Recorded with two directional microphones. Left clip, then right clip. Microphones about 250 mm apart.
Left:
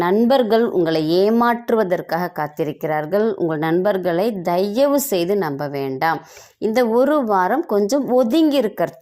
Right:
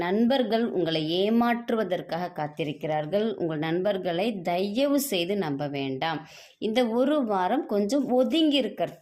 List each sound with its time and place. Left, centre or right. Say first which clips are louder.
0.0 s speech: left 9 dB; left
6.7 s speech: left 8 dB; left